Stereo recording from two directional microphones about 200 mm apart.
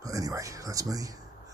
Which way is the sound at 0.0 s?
15° right (ahead or behind).